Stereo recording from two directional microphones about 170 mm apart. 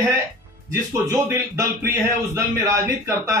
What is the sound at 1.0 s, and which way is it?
A man's voice, 15° right (ahead or behind).